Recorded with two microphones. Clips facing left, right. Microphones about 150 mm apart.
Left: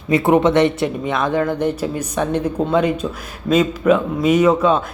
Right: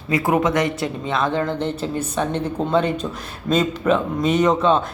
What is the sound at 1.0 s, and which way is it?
Speech, 15° left (ahead or behind).